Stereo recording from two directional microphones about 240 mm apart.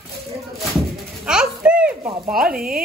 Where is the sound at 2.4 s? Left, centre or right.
Right.